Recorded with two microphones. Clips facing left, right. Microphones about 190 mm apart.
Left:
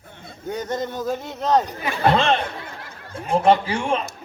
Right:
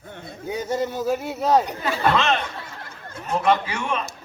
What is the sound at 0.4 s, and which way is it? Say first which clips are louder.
Speech: right 1 dB; 10° right (ahead or behind).